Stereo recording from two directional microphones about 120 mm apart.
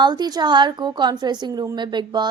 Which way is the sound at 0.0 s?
35° right (ahead or behind).